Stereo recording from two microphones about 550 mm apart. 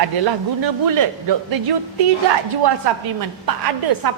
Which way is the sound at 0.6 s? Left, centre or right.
Right.